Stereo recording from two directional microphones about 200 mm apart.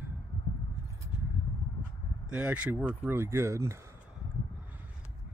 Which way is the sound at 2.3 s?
5° right (ahead or behind).